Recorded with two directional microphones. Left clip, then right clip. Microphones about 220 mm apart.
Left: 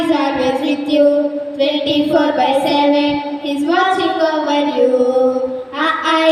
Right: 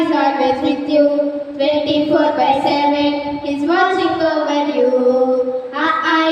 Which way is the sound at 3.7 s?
55° left (ahead or behind).